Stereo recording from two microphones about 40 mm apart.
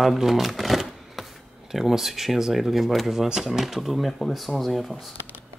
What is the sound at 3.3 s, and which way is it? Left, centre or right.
Speech, centre.